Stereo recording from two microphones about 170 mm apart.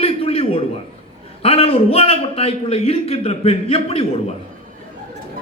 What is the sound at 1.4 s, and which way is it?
A man's voice, 35° left (ahead or behind).